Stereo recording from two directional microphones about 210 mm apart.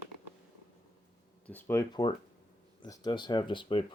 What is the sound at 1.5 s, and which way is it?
Speech, 10° left (ahead or behind).